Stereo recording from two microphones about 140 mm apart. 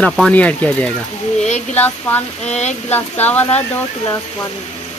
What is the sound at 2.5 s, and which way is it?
Speech, 55° left (ahead or behind).